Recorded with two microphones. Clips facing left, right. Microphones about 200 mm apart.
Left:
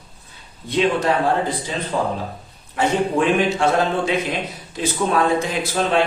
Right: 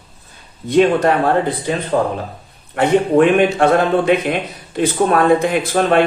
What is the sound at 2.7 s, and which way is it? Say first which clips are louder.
A man's voice: right 6 dB; 60° right (ahead or behind).